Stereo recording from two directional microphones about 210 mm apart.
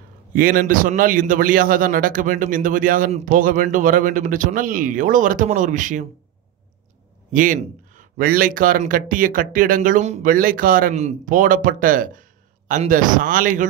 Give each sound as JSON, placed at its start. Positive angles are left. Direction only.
{"t": 0.3, "sound": "speech", "side_deg": -40}
{"t": 7.3, "sound": "speech", "side_deg": -40}